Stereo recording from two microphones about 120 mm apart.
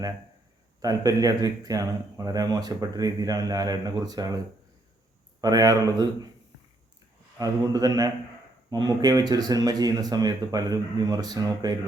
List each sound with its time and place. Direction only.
0.8 s speech: 30° right (ahead or behind)
5.4 s speech: 30° right (ahead or behind)
7.3 s speech: 30° right (ahead or behind)